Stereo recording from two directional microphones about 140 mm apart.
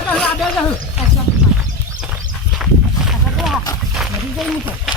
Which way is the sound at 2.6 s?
5° right (ahead or behind).